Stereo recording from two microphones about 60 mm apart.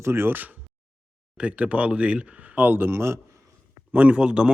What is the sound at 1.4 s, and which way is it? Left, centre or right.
Speech, right.